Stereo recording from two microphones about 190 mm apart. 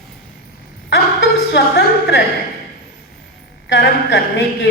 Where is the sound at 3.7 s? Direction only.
65° left (ahead or behind).